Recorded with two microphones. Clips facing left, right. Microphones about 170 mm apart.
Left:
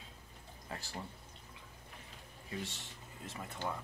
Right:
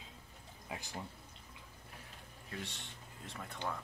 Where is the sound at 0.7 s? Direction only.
15° right (ahead or behind).